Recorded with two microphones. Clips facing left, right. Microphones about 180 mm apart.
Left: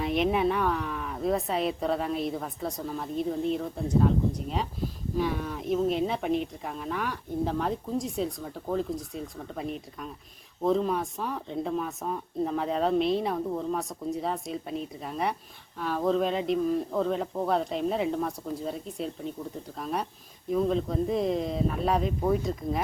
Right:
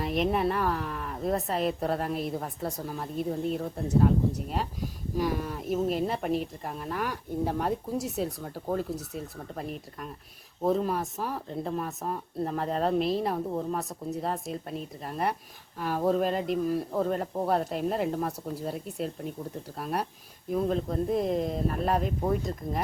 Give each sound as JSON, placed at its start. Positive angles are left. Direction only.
{"t": 0.0, "sound": "speech", "side_deg": 0}